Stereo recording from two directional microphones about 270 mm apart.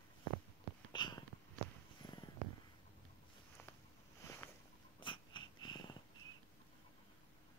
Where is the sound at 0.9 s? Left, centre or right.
Centre.